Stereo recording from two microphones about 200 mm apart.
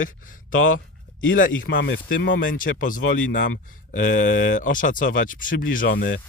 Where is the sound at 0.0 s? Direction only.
40° left (ahead or behind).